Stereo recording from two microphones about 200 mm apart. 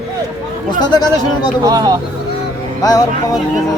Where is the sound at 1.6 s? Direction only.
20° right (ahead or behind).